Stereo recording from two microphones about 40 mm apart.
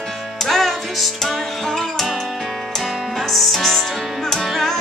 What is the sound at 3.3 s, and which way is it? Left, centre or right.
Music, centre.